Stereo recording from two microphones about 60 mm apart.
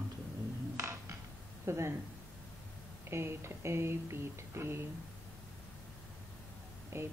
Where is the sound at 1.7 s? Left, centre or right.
Right.